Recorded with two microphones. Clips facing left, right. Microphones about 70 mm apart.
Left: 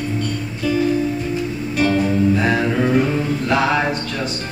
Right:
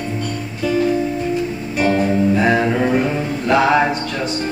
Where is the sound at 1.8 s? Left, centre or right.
Right.